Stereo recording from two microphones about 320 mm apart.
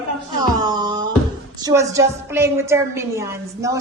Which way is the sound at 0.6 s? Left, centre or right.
Centre.